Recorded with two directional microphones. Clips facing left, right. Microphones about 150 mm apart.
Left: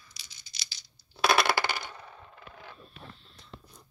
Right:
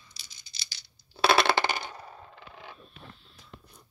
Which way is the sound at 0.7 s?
65° right (ahead or behind).